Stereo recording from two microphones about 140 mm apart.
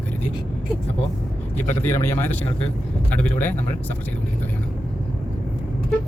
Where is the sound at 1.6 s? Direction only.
15° left (ahead or behind).